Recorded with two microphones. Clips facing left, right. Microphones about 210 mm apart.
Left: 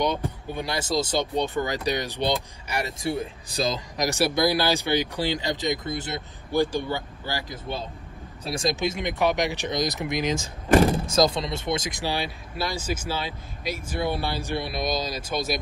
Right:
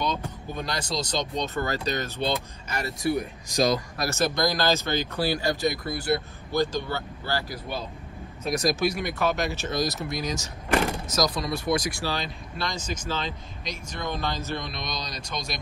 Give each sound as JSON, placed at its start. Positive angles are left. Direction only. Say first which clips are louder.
{"t": 0.0, "sound": "speech", "louder": "left 4 dB", "side_deg": 15}
{"t": 3.0, "sound": "speech", "louder": "right 2 dB", "side_deg": 25}
{"t": 3.9, "sound": "speech", "louder": "left 2 dB", "side_deg": 15}